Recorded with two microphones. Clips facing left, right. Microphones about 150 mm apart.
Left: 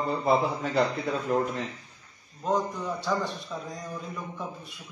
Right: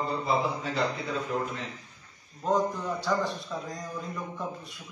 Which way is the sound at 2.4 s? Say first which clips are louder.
Right 1 dB; centre (ahead or behind).